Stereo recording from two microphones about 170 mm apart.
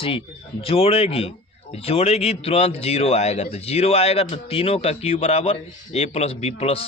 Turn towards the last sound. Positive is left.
turn(degrees=35)  # may be behind; listen again after turning